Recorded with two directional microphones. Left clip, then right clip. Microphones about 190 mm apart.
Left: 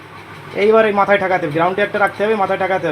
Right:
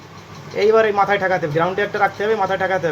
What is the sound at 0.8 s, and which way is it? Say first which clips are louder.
Speech: left 3 dB; 30° left (ahead or behind).